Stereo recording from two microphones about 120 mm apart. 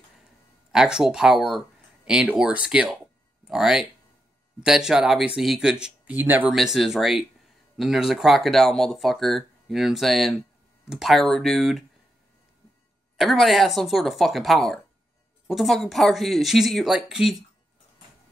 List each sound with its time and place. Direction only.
0.7 s speech: 5° right (ahead or behind)
6.5 s speech: centre (ahead or behind)
13.2 s speech: centre (ahead or behind)